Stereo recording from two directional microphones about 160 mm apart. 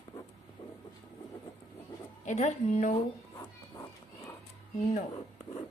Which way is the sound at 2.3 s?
45° left (ahead or behind).